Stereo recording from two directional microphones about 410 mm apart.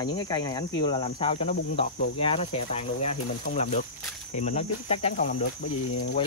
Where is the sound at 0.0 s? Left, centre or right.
Centre.